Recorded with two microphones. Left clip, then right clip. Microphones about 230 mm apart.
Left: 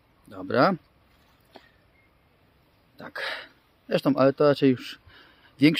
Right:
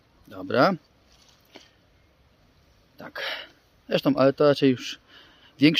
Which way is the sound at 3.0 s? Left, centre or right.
Centre.